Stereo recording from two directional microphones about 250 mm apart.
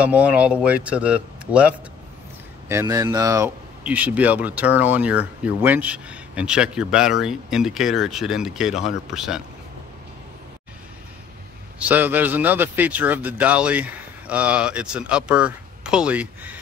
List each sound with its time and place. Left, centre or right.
0.0 s speech: centre
2.7 s speech: centre
11.9 s speech: centre